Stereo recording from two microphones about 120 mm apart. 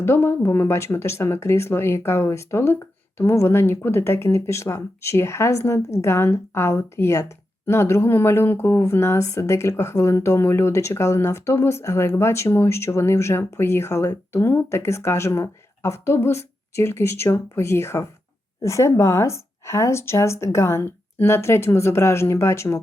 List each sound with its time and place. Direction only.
0.0 s speech: 20° left (ahead or behind)